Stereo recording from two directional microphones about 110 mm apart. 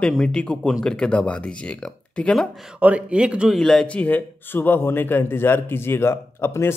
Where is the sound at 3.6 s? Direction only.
5° left (ahead or behind); by 6.7 s 25° left (ahead or behind).